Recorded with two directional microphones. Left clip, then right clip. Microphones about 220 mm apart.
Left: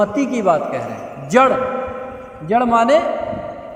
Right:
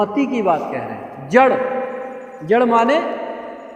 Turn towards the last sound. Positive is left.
turn(degrees=45)  # may be behind; listen again after turning